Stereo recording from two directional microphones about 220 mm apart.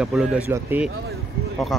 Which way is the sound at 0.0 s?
5° right (ahead or behind).